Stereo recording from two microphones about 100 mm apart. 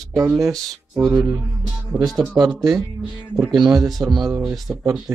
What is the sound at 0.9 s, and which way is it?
Speech, 25° right (ahead or behind).